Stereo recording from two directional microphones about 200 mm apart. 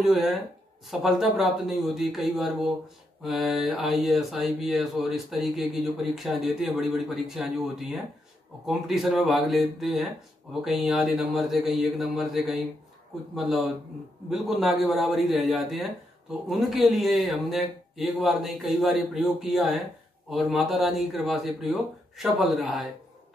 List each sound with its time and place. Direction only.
0.0 s a man's voice: centre (ahead or behind)